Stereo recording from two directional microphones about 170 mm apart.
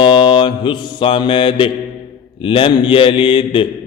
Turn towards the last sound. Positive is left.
turn(degrees=30)  # may be behind; listen again after turning